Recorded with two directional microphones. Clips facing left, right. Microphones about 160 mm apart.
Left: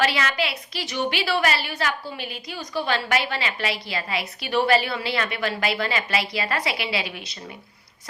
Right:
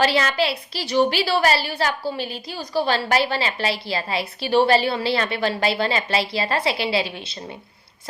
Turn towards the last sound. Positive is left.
turn(degrees=-30)  # may be behind; listen again after turning